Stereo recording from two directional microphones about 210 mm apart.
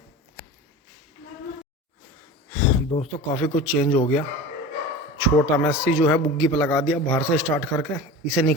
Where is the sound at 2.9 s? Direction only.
20° left (ahead or behind).